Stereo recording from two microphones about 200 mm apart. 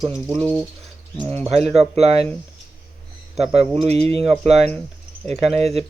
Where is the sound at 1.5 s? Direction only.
30° right (ahead or behind).